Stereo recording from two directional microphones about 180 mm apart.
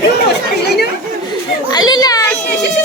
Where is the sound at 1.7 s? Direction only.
20° left (ahead or behind).